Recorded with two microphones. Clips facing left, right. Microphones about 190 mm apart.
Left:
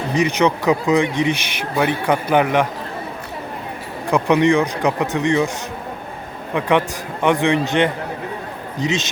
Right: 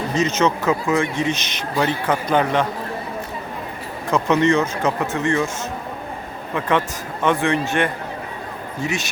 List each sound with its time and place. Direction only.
0.1 s speech: 15° left (ahead or behind)
4.1 s speech: 15° left (ahead or behind)
6.5 s speech: 15° left (ahead or behind)